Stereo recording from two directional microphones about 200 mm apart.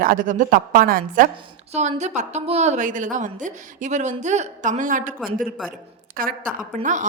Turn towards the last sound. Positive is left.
turn(degrees=-40)  # may be behind; listen again after turning